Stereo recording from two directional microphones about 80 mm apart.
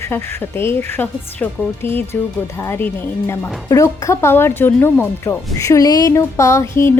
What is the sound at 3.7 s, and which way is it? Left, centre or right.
Speech, left.